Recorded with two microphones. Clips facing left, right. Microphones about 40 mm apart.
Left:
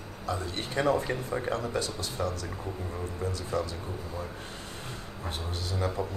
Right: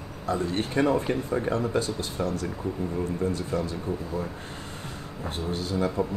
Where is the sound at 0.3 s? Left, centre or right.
Right.